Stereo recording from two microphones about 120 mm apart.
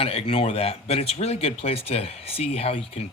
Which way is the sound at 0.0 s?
55° left (ahead or behind).